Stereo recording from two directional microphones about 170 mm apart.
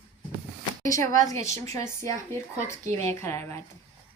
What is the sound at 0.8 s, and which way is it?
A woman's voice, 20° left (ahead or behind).